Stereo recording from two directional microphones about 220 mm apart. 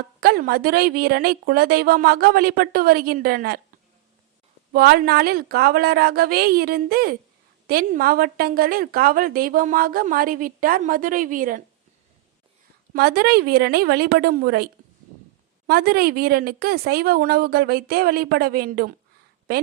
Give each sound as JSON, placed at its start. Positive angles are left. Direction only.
{"t": 0.2, "sound": "a woman's voice", "side_deg": -40}
{"t": 4.7, "sound": "a woman's voice", "side_deg": -45}
{"t": 12.9, "sound": "a woman's voice", "side_deg": -45}